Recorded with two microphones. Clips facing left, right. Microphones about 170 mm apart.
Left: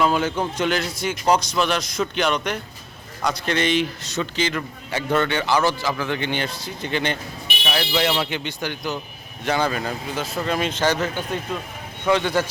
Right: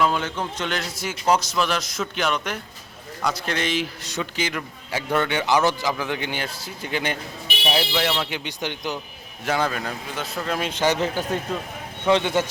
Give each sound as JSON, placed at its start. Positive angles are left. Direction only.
{"t": 0.0, "sound": "a man's voice", "side_deg": 5}
{"t": 0.8, "sound": "a man's voice", "side_deg": 0}
{"t": 7.6, "sound": "speech", "side_deg": -25}
{"t": 7.9, "sound": "a man's voice", "side_deg": 5}
{"t": 8.3, "sound": "speech", "side_deg": -15}
{"t": 9.4, "sound": "a man's voice", "side_deg": 0}
{"t": 10.7, "sound": "speech", "side_deg": -15}
{"t": 11.0, "sound": "a man's voice", "side_deg": -40}
{"t": 12.0, "sound": "speech", "side_deg": -20}